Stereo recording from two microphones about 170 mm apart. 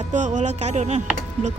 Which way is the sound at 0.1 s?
45° right (ahead or behind).